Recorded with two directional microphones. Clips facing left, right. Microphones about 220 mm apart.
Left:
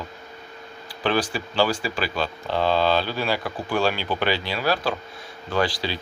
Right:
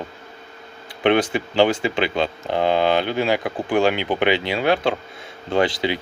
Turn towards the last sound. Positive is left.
turn(degrees=-20)  # may be behind; listen again after turning